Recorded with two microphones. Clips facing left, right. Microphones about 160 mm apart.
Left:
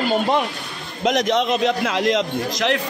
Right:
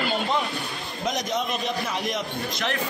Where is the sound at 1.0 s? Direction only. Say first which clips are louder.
Left 9 dB; 85° left.